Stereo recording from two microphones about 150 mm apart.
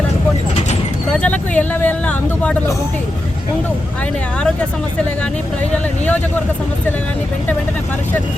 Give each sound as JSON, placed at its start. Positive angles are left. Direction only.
{"t": 1.1, "sound": "speech", "side_deg": 10}